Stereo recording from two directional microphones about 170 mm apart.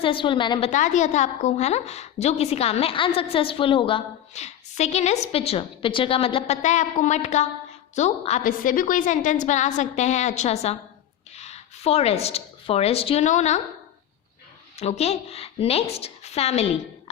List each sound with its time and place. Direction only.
0.0 s a woman's voice: 30° left (ahead or behind)
0.7 s a woman's voice: 45° left (ahead or behind)
14.8 s a woman's voice: 40° left (ahead or behind)